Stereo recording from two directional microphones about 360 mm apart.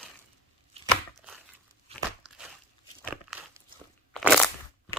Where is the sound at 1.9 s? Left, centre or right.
Centre.